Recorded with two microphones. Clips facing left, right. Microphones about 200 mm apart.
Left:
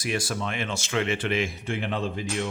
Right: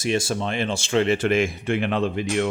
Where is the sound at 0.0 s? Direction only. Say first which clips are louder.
Right 5 dB; 25° right (ahead or behind).